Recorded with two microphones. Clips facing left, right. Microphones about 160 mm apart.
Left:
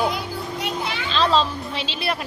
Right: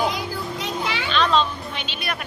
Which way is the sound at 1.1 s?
30° left (ahead or behind).